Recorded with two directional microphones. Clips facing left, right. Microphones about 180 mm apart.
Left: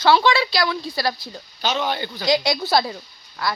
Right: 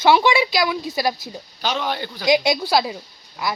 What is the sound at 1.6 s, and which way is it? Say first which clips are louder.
Speech: left 1 dB; 5° right (ahead or behind).